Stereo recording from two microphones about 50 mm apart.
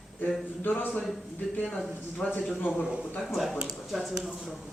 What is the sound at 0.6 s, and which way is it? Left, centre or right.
Speech, left.